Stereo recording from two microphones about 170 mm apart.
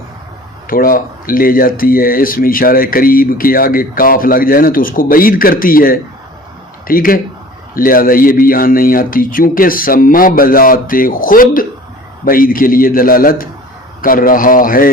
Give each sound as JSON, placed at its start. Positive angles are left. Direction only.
{"t": 0.7, "sound": "speech", "side_deg": 55}